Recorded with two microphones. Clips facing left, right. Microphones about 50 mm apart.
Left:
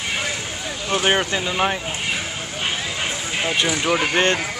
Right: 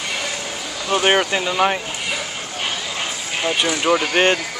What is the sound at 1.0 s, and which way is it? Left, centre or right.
Speech, centre.